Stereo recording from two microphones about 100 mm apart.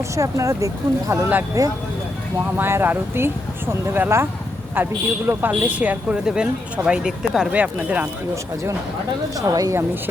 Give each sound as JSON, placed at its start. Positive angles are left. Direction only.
{"t": 0.2, "sound": "speech", "side_deg": -30}
{"t": 2.6, "sound": "speech", "side_deg": -20}
{"t": 9.5, "sound": "speech", "side_deg": -35}